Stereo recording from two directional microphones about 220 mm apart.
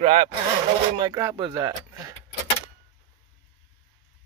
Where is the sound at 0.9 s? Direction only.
20° right (ahead or behind).